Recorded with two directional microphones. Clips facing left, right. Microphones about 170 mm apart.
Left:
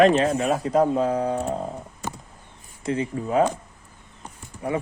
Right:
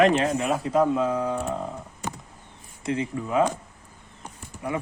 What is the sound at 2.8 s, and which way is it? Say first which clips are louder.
Speech: left 2 dB; 35° left (ahead or behind).